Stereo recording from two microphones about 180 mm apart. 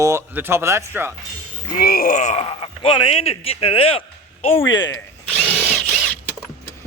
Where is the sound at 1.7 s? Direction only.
55° left (ahead or behind); by 4.5 s 30° left (ahead or behind).